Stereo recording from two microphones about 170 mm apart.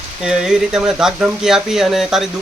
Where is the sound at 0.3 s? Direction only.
5° right (ahead or behind).